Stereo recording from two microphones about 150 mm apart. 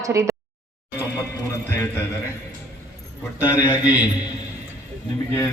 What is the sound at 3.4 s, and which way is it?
Speech, 10° right (ahead or behind).